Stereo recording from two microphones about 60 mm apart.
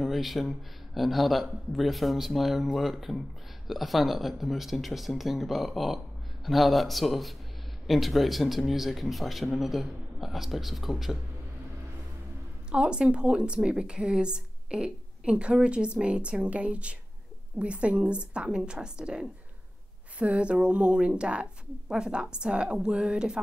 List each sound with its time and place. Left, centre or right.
0.0 s a man's voice: centre
12.7 s a woman's voice: centre